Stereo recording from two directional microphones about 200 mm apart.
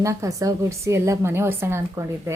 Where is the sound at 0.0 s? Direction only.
15° right (ahead or behind).